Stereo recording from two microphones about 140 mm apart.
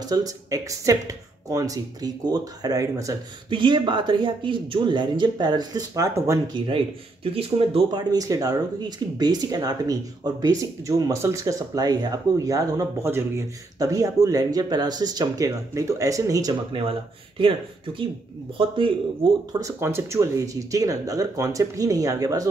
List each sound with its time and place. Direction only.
0.0 s speech: 25° right (ahead or behind)
3.4 s speech: 35° right (ahead or behind)
7.3 s speech: 45° right (ahead or behind)
8.0 s speech: 25° right (ahead or behind)
17.4 s speech: 35° right (ahead or behind)
19.6 s speech: 20° right (ahead or behind)